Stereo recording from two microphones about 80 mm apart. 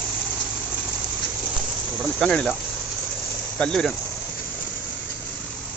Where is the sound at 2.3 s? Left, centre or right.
Centre.